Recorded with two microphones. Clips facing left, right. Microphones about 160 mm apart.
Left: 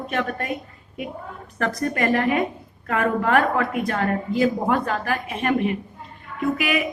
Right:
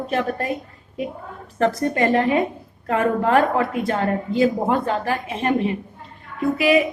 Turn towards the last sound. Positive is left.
turn(degrees=-30)  # may be behind; listen again after turning